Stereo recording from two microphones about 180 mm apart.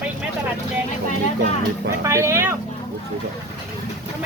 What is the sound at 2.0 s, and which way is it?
Speech, 15° right (ahead or behind).